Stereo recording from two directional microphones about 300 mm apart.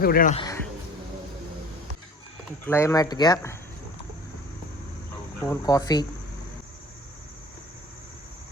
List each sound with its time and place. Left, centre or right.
0.0 s a man's voice: left
0.3 s a sound: centre
2.6 s speech: centre
5.4 s speech: centre